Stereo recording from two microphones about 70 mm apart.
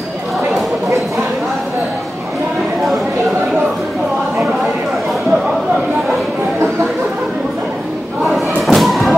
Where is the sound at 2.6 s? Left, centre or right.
Centre.